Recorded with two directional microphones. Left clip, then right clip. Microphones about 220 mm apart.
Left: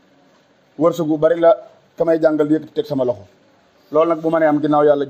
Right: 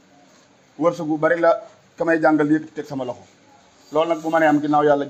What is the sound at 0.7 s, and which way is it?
A man's voice, 50° left (ahead or behind).